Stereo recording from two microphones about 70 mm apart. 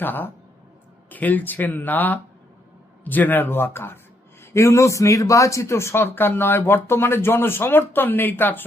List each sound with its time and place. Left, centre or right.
0.0 s speech: left